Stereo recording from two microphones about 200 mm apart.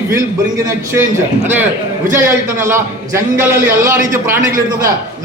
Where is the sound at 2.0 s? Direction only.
15° right (ahead or behind).